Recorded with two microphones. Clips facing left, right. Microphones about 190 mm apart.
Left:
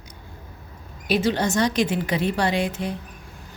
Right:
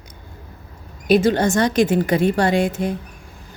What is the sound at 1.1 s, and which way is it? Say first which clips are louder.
A woman's voice: right 6 dB; 50° right (ahead or behind).